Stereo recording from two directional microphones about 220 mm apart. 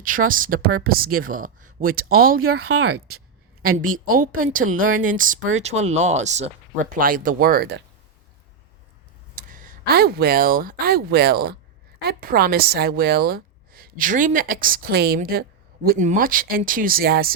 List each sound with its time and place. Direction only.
0.0 s a woman's voice: 40° right (ahead or behind)
2.4 s a woman's voice: 80° right
4.8 s a woman's voice: 35° right (ahead or behind)
9.3 s a woman's voice: 40° right (ahead or behind)